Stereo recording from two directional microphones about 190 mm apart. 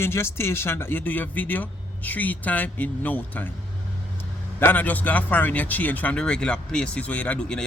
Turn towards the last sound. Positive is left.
turn(degrees=5)  # may be behind; listen again after turning